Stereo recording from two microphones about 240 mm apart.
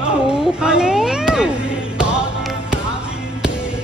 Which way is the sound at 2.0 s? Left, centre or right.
Centre.